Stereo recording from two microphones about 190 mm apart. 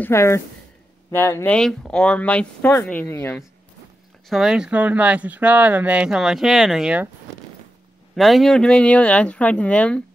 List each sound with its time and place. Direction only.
0.0 s speech: 15° left (ahead or behind)
4.3 s speech: centre (ahead or behind)
8.2 s speech: centre (ahead or behind)